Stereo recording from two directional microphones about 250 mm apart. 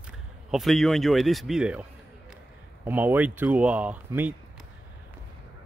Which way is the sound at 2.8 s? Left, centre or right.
Centre.